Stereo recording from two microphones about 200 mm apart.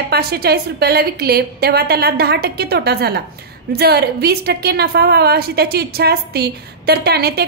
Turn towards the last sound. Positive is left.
turn(degrees=-50)  # may be behind; listen again after turning